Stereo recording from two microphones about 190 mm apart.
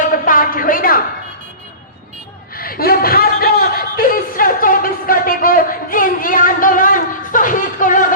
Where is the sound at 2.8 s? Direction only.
50° left (ahead or behind).